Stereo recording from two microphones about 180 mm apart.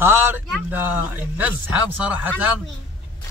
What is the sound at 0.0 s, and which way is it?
A man's voice, 10° right (ahead or behind).